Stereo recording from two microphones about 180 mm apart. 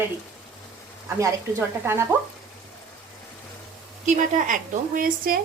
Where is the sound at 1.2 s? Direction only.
15° right (ahead or behind).